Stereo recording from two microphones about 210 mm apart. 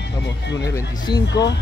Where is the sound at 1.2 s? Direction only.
55° left (ahead or behind).